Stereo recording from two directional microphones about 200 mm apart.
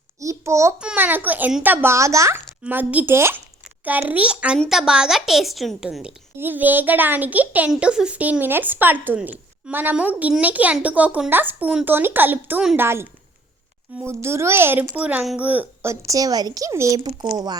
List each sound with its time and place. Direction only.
0.2 s babbling: 15° right (ahead or behind)
0.8 s a child's voice: 5° right (ahead or behind)